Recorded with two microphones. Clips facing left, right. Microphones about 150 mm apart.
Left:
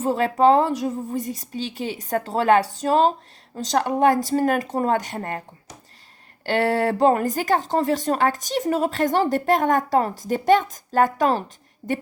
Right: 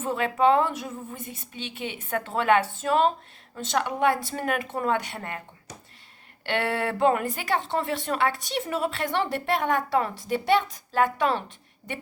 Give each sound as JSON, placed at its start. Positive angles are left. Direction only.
{"t": 0.0, "sound": "a woman's voice", "side_deg": 40}
{"t": 6.4, "sound": "a woman's voice", "side_deg": 40}